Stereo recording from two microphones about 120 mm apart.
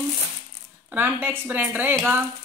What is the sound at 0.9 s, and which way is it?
A woman's voice, 15° right (ahead or behind).